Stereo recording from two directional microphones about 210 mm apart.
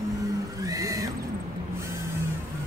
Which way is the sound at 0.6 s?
15° right (ahead or behind).